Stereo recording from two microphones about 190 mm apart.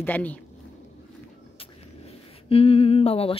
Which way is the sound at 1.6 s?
30° left (ahead or behind).